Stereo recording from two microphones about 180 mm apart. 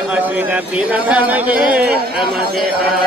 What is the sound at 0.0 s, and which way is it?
A man's voice, 10° right (ahead or behind).